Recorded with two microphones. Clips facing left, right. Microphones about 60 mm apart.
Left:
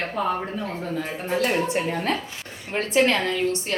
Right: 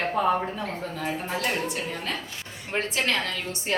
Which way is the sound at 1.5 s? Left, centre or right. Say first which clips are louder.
Left 6 dB; left.